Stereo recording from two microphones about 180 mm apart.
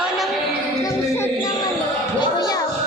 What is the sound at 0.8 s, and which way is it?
Music, 20° left (ahead or behind).